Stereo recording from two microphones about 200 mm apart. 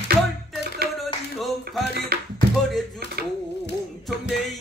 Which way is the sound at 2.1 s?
50° right (ahead or behind).